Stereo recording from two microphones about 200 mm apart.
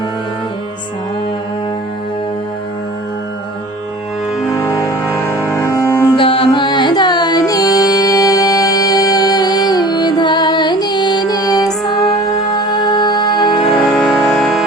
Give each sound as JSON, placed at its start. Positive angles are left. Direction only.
{"t": 4.4, "sound": "music", "side_deg": 15}
{"t": 6.1, "sound": "music", "side_deg": 25}
{"t": 12.7, "sound": "music", "side_deg": 20}
{"t": 13.9, "sound": "music", "side_deg": 0}